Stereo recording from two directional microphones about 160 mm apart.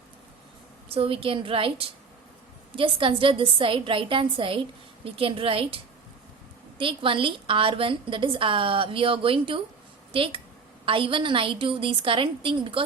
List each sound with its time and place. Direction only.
0.9 s a woman's voice: 35° right (ahead or behind)